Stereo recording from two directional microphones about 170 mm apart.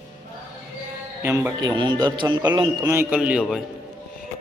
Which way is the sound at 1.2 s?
15° right (ahead or behind).